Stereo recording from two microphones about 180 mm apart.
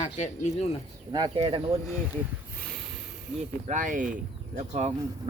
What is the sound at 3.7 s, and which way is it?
Speech, 45° right (ahead or behind).